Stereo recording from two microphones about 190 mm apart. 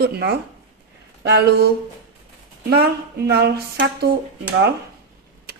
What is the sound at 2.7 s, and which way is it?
Speech, 55° right (ahead or behind).